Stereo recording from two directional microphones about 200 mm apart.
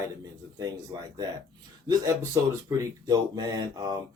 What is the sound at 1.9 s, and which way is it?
Speech, 20° right (ahead or behind).